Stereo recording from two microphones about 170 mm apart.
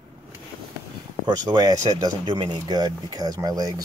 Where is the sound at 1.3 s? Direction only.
25° right (ahead or behind).